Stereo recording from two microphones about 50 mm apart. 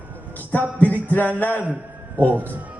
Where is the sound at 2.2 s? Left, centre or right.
Right.